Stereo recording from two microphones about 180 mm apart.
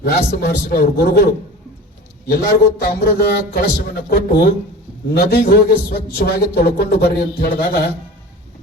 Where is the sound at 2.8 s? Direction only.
55° left (ahead or behind).